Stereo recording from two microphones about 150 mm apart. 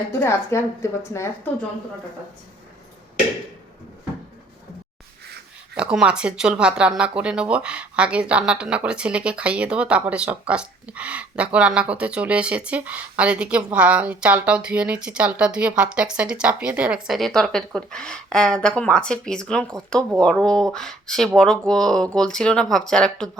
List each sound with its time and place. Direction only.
0.2 s a woman's voice: 15° left (ahead or behind)
5.7 s speech: 5° right (ahead or behind)